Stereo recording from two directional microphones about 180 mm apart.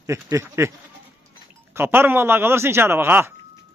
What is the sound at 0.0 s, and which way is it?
Speech, 15° right (ahead or behind).